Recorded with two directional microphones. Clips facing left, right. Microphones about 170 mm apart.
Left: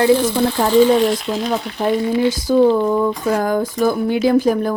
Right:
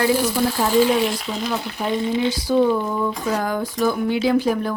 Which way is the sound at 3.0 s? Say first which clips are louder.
Left 5 dB; 45° left (ahead or behind).